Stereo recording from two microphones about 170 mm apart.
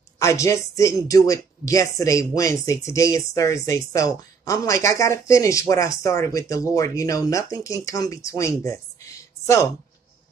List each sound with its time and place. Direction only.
0.2 s speech: 15° left (ahead or behind)